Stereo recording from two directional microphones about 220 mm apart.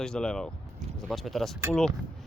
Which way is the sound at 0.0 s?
5° left (ahead or behind).